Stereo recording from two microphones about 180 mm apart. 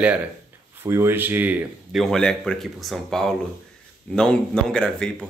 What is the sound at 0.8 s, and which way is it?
A man's voice, 15° right (ahead or behind).